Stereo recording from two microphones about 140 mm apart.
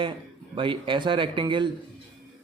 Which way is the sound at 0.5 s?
35° right (ahead or behind).